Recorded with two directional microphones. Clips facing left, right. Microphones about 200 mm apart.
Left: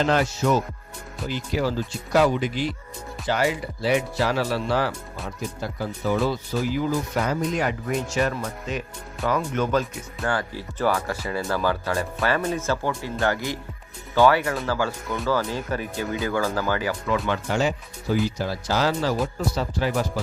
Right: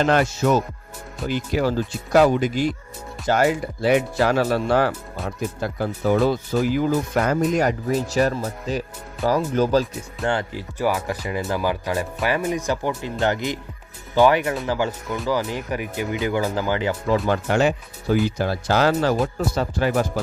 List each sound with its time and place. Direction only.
0.0 s speech: 55° right (ahead or behind); by 9.8 s 35° right (ahead or behind)
10.2 s speech: 20° right (ahead or behind)
17.5 s speech: 60° right (ahead or behind)